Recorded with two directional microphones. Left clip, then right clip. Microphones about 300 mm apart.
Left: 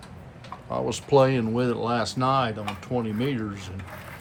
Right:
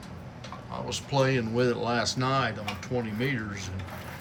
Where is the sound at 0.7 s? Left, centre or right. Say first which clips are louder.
Left 9 dB; centre.